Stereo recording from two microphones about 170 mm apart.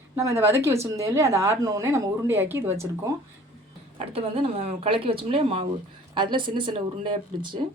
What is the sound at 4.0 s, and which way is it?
Speech, 35° right (ahead or behind).